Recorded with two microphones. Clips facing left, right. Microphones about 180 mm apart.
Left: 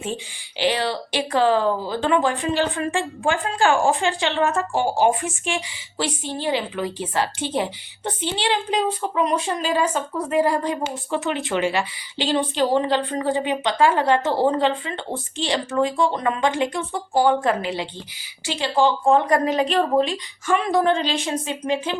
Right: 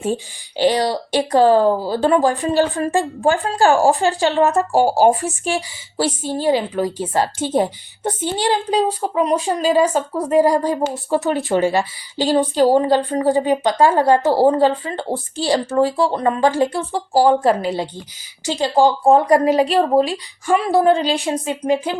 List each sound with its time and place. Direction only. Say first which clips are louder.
0.0 s a woman's voice: right 7 dB; 45° right (ahead or behind)